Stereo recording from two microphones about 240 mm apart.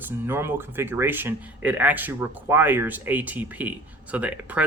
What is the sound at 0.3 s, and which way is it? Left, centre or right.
Speech, centre.